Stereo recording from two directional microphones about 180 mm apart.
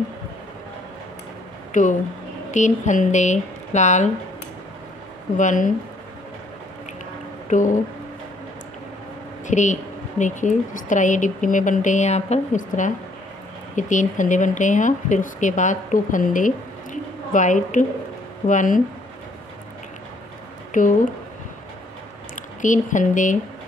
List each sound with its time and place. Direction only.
1.7 s speech: 45° left (ahead or behind)
5.4 s speech: 45° left (ahead or behind)
7.4 s speech: 45° left (ahead or behind)
9.5 s speech: 40° left (ahead or behind)
20.7 s speech: 50° left (ahead or behind)
22.3 s speech: 45° left (ahead or behind)